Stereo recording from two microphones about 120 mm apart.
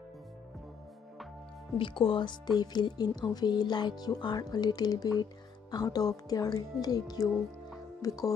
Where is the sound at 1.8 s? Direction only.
45° left (ahead or behind).